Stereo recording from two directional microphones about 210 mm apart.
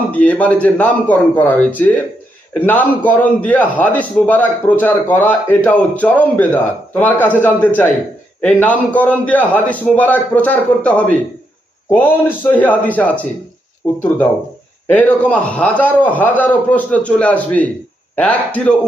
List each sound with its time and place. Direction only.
0.1 s a man's voice: 5° left (ahead or behind)
14.8 s a man's voice: 10° left (ahead or behind)